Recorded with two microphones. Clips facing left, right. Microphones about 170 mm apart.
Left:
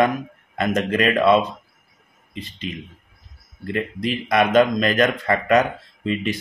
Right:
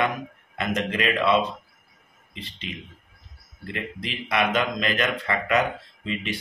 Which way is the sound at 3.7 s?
40° left (ahead or behind).